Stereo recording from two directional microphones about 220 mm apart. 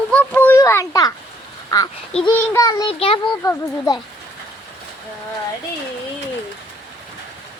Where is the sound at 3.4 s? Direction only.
15° left (ahead or behind).